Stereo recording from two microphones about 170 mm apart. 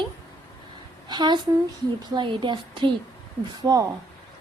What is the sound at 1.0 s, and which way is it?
A woman's voice, 25° right (ahead or behind).